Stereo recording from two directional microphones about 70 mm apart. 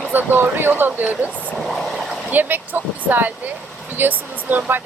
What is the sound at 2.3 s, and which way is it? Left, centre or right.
Speech, right.